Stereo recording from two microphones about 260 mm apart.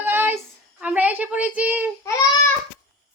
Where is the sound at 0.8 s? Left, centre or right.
Centre.